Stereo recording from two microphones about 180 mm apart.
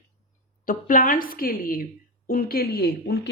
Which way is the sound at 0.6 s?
50° left (ahead or behind).